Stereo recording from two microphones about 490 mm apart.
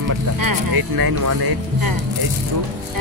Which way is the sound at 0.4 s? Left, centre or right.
Right.